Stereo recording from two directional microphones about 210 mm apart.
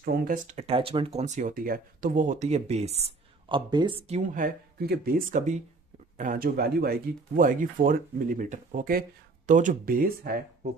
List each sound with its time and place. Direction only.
0.0 s speech: 45° right (ahead or behind)
0.6 s speech: 25° right (ahead or behind)
4.2 s speech: 40° right (ahead or behind)